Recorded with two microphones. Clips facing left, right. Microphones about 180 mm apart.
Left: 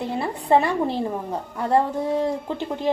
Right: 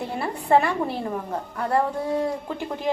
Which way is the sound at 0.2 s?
20° left (ahead or behind).